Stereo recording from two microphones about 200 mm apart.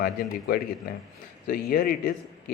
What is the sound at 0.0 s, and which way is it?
Speech, 50° left (ahead or behind).